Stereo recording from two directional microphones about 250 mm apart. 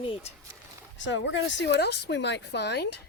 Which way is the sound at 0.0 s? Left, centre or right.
Left.